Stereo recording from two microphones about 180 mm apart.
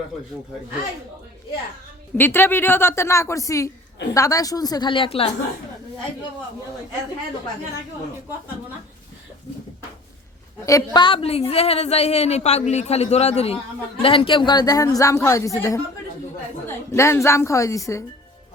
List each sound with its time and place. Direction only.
2.1 s a woman's voice: 10° left (ahead or behind); by 5.2 s 30° left (ahead or behind)
10.7 s a woman's voice: 20° left (ahead or behind)